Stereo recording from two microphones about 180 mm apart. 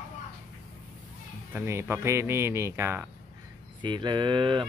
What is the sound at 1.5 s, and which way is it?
Speech, 15° right (ahead or behind).